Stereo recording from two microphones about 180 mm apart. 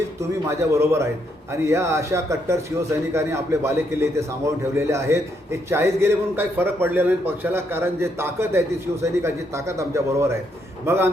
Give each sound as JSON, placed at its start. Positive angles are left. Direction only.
{"t": 0.2, "sound": "a man's voice", "side_deg": -15}